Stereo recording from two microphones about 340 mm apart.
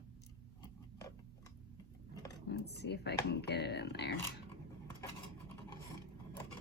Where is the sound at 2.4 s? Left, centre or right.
Left.